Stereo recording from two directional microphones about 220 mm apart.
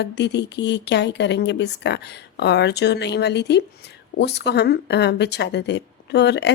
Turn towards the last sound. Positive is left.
turn(degrees=50)  # may be behind; listen again after turning